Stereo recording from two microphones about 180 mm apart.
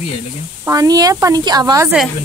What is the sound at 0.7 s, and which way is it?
Speech, 20° right (ahead or behind).